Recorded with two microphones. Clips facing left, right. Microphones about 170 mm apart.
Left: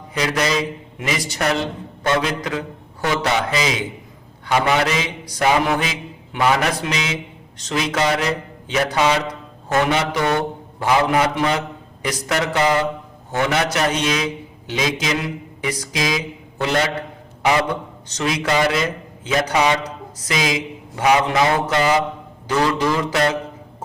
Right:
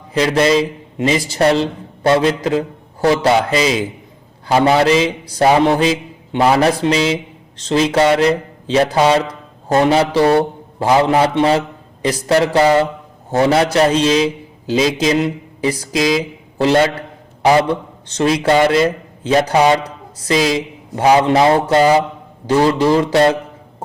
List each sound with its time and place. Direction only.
0.1 s a man's voice: 30° right (ahead or behind)